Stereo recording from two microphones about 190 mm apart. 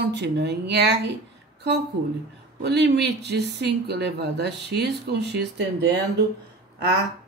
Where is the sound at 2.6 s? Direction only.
65° right (ahead or behind).